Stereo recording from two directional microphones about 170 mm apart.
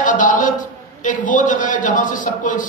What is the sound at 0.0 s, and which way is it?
A woman's voice, 50° left (ahead or behind).